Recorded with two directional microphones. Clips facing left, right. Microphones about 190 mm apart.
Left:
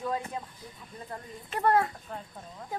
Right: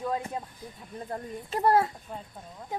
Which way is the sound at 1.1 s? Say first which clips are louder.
Right 6 dB; 35° right (ahead or behind).